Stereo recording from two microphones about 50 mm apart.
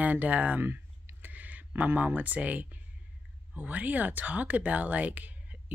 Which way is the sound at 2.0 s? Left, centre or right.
Right.